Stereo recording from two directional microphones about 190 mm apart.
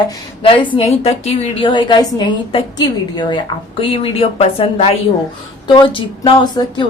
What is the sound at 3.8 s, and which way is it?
A woman's voice, 30° left (ahead or behind).